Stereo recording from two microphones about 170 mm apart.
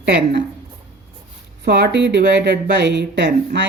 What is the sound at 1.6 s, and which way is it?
A woman's voice, 75° right (ahead or behind).